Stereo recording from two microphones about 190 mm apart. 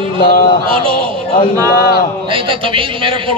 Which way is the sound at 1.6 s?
50° left (ahead or behind).